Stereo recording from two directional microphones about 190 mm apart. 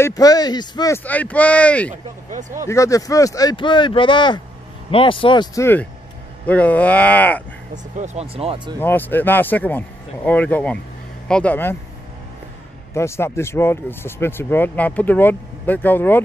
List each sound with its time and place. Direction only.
0.0 s speech: 20° left (ahead or behind)
8.0 s speech: 35° right (ahead or behind)
8.7 s speech: 10° left (ahead or behind)
12.9 s speech: 15° left (ahead or behind)